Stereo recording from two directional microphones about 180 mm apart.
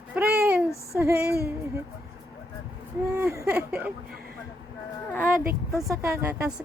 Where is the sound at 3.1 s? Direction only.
15° right (ahead or behind).